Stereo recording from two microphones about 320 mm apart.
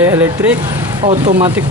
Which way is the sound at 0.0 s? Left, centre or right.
Centre.